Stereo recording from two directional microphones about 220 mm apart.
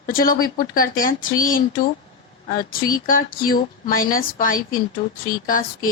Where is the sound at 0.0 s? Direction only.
40° left (ahead or behind).